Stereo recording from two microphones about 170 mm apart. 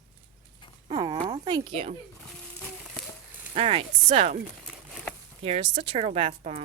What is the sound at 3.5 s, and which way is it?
Speech, 35° right (ahead or behind).